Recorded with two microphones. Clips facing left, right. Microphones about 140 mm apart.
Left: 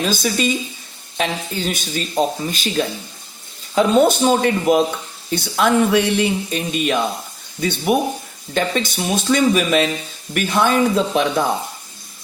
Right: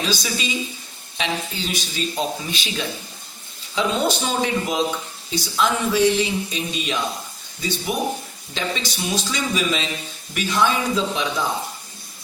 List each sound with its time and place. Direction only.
0.0 s speech: 50° left (ahead or behind)